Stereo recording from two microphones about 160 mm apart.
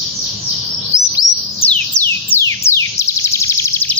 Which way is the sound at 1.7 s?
10° left (ahead or behind).